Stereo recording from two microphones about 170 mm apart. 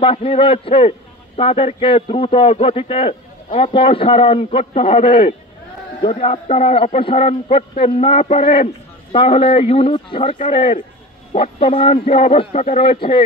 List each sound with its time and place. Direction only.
0.0 s a man's voice: 35° left (ahead or behind)
11.3 s a man's voice: 35° left (ahead or behind)